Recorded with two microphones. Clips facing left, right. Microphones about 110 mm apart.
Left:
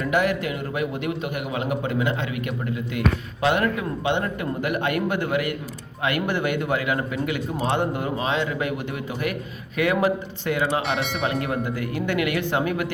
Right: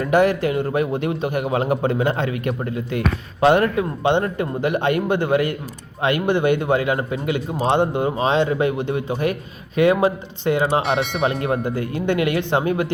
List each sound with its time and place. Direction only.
0.0 s a man's voice: 35° right (ahead or behind)
10.8 s speech: centre (ahead or behind)
11.2 s a man's voice: 30° right (ahead or behind)